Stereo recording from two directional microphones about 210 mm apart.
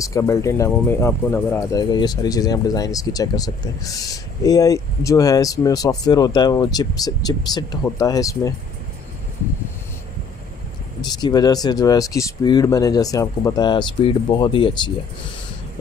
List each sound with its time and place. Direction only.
0.0 s speech: 15° left (ahead or behind)
11.1 s speech: 20° left (ahead or behind)